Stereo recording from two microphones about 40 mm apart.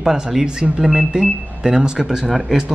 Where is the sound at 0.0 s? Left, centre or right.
Centre.